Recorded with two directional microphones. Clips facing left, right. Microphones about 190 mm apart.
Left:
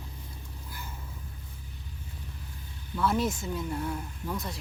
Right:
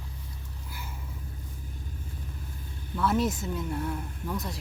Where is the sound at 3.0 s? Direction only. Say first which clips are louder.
Right 1 dB; centre (ahead or behind).